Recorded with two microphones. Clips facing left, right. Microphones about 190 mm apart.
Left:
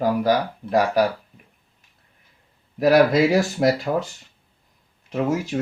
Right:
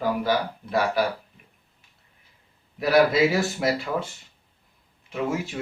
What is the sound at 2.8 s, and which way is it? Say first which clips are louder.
Speech: left 3 dB; 40° left (ahead or behind).